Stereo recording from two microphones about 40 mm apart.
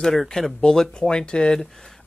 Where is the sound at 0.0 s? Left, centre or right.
Centre.